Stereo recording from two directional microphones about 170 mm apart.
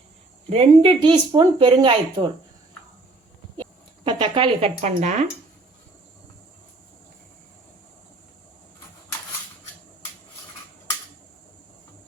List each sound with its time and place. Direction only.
0.5 s speech: 35° right (ahead or behind)
3.6 s speech: 30° right (ahead or behind)